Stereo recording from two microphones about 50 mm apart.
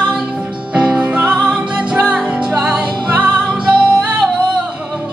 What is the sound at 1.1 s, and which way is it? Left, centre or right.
Music, centre.